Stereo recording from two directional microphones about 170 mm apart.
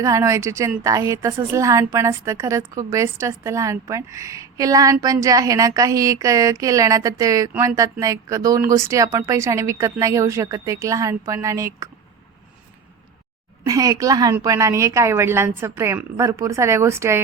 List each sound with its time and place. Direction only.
0.0 s a woman's voice: 20° right (ahead or behind)
7.5 s a woman's voice: 10° right (ahead or behind)
7.8 s a woman's voice: 20° right (ahead or behind)
13.7 s a woman's voice: 20° right (ahead or behind)